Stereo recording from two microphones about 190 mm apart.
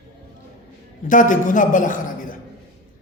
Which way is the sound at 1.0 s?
45° left (ahead or behind).